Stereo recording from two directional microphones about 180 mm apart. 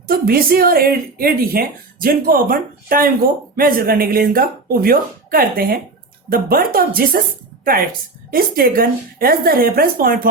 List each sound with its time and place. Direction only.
0.1 s a woman's voice: 55° right (ahead or behind)
8.3 s a woman's voice: 55° right (ahead or behind)